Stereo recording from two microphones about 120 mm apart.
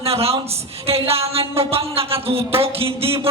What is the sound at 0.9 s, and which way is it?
Music, 55° right (ahead or behind).